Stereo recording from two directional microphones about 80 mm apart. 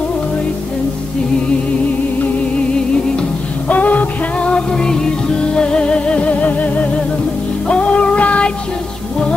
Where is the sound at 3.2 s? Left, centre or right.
Centre.